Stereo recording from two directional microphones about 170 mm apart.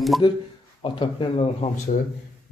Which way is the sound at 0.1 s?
Centre (ahead or behind).